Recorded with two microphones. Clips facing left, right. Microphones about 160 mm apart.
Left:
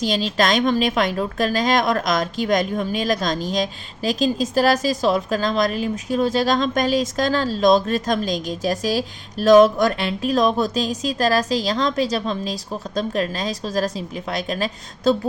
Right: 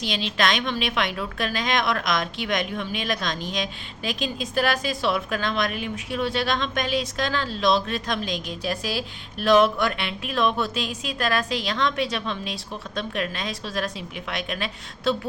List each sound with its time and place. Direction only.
0.0 s a woman's voice: 40° left (ahead or behind)